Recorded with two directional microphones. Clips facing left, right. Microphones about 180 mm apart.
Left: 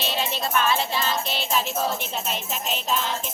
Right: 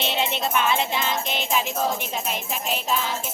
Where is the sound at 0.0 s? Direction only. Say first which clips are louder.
Right 2 dB; 20° right (ahead or behind).